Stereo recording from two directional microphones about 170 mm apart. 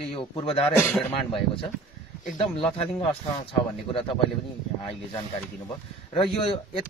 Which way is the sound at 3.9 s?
30° left (ahead or behind).